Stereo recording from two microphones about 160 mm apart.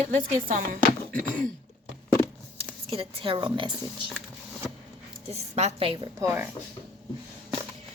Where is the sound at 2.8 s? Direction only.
35° right (ahead or behind).